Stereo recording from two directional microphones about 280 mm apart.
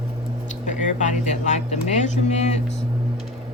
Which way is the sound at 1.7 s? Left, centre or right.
Left.